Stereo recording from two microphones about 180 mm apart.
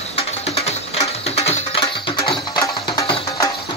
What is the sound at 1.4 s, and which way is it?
Music, 35° left (ahead or behind).